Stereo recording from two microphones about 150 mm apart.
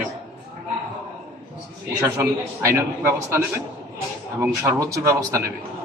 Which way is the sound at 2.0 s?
15° right (ahead or behind).